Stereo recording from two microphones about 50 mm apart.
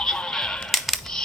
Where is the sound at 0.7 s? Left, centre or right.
Centre.